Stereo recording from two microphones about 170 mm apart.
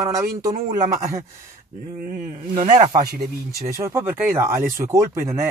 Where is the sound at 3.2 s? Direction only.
20° right (ahead or behind).